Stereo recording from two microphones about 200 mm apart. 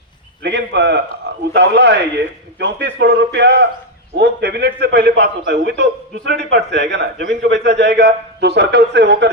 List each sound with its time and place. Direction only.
0.4 s a man's voice: 60° right (ahead or behind)